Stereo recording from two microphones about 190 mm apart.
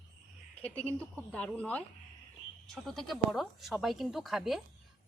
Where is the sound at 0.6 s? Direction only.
5° left (ahead or behind).